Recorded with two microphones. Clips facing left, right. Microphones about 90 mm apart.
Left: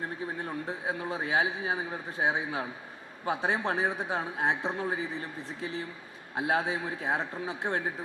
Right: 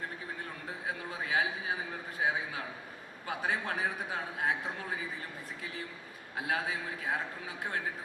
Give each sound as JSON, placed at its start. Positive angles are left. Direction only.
{"t": 0.4, "sound": "a man's voice", "side_deg": 30}